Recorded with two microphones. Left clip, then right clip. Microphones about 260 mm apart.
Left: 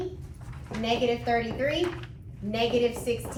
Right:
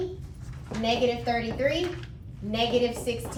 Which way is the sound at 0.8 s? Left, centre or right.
Centre.